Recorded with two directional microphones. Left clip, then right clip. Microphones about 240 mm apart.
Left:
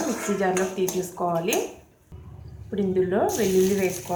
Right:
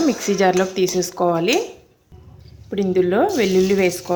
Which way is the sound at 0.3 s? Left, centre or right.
Right.